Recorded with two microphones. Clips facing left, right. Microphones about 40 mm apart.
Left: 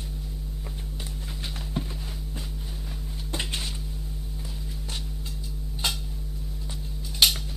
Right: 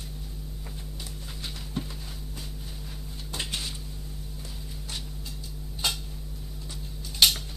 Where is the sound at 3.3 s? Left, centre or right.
Centre.